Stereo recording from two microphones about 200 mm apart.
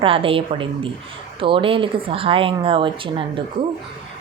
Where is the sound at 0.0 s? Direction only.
25° right (ahead or behind).